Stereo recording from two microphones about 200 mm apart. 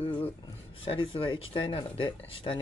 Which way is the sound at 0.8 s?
25° left (ahead or behind).